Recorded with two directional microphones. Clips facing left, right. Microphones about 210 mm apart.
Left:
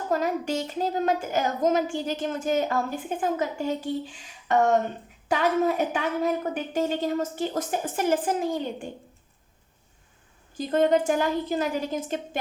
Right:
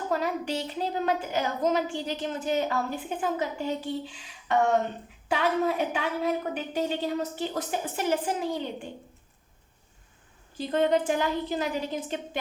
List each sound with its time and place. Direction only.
0.1 s a woman's voice: 45° left (ahead or behind)
10.5 s a woman's voice: 45° left (ahead or behind)